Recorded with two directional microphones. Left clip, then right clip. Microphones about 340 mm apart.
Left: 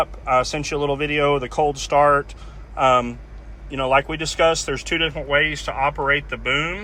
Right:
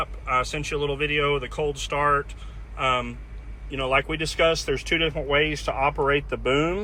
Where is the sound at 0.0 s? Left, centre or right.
Centre.